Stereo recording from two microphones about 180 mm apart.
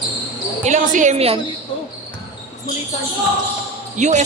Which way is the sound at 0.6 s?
40° right (ahead or behind).